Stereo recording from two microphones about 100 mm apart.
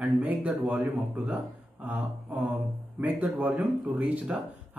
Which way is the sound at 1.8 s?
15° right (ahead or behind).